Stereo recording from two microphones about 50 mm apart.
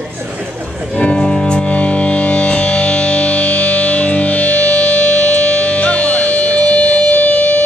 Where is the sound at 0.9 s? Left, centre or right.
Centre.